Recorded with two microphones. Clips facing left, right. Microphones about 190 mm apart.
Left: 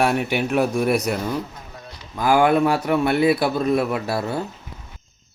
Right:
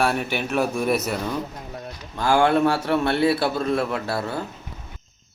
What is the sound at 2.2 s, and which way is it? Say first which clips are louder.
Speech: left 2 dB; 20° left (ahead or behind).